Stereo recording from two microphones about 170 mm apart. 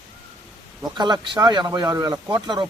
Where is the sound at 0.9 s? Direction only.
25° right (ahead or behind).